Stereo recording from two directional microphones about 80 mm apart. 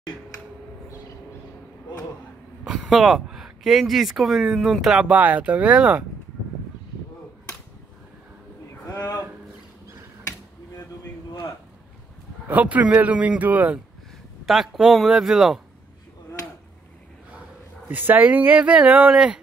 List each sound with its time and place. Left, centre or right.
2.6 s speech: centre
5.1 s speech: centre
8.8 s a sound: left
12.4 s a man's voice: centre
14.4 s speech: centre
17.8 s speech: right